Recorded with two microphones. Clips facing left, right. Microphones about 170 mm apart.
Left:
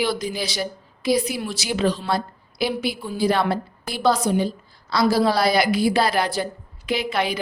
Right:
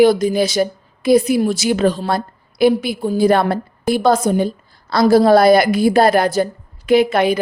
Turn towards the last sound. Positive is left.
turn(degrees=-50)  # may be behind; listen again after turning